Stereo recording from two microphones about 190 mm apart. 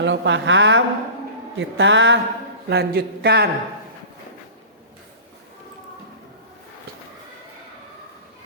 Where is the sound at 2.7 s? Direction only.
55° right (ahead or behind).